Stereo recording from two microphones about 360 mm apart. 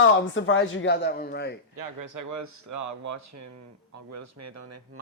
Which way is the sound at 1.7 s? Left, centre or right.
Right.